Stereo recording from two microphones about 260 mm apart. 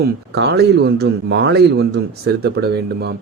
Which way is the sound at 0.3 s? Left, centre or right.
Right.